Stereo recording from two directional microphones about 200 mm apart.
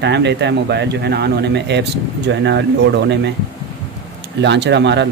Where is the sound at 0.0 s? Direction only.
60° right (ahead or behind).